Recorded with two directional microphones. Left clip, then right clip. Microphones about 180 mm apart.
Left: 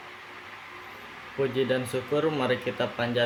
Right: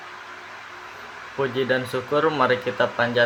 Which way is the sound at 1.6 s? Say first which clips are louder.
Right 5 dB; 15° left (ahead or behind).